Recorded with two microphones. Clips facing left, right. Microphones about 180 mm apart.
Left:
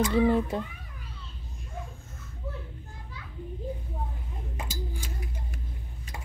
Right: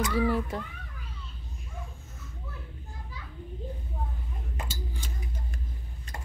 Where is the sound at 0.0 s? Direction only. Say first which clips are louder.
Left 4 dB; 25° left (ahead or behind).